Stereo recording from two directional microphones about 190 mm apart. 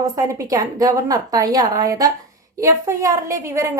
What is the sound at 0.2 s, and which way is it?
A woman's voice, 15° right (ahead or behind).